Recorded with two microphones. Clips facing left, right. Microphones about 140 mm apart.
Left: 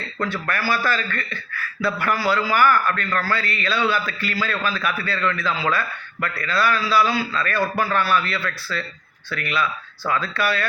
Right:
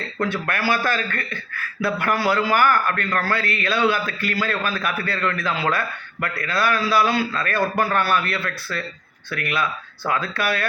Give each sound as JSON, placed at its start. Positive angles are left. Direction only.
{"t": 0.2, "sound": "a man's voice", "side_deg": -55}